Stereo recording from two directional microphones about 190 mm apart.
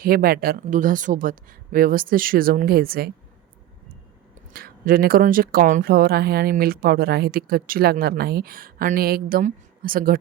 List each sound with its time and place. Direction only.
0.0 s speech: 50° right (ahead or behind)
4.4 s speech: 50° right (ahead or behind)